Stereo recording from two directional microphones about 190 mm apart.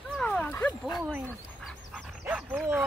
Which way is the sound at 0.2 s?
5° left (ahead or behind).